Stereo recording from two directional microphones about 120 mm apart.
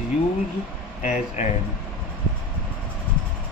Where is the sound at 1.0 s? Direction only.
75° left (ahead or behind).